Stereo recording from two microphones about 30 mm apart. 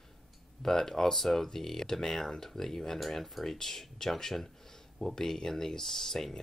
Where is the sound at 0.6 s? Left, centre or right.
Centre.